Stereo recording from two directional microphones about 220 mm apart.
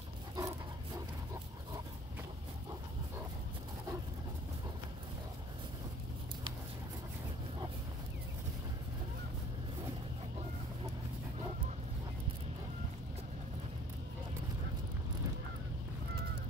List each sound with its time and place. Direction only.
0.4 s dog: 15° right (ahead or behind)